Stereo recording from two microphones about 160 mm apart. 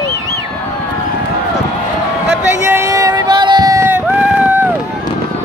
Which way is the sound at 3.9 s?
10° right (ahead or behind).